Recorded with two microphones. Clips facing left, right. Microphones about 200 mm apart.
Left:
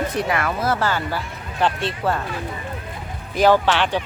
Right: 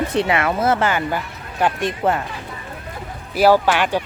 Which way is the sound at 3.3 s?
10° right (ahead or behind).